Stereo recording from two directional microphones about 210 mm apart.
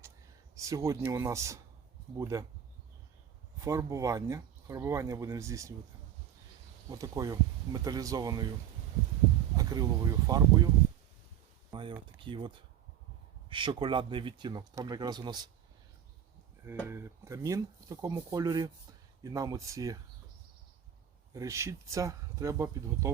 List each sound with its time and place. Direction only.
0.5 s speech: 15° right (ahead or behind)
3.6 s speech: 15° right (ahead or behind)
6.9 s speech: 15° right (ahead or behind)
9.6 s speech: 15° right (ahead or behind)
11.7 s speech: 25° right (ahead or behind)
16.8 s speech: 10° right (ahead or behind)
21.3 s speech: 15° right (ahead or behind)